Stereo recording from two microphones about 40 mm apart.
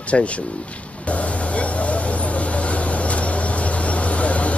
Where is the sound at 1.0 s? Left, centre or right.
Left.